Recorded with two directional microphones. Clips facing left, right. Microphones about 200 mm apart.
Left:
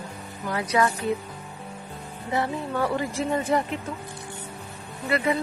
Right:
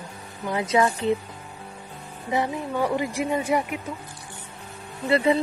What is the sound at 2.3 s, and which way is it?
Speech, 15° right (ahead or behind).